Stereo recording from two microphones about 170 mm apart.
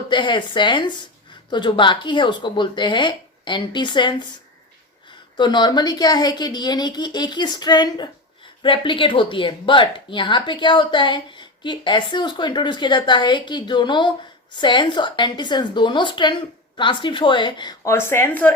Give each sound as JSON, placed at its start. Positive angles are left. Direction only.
{"t": 0.1, "sound": "speech", "side_deg": 30}
{"t": 5.4, "sound": "speech", "side_deg": 25}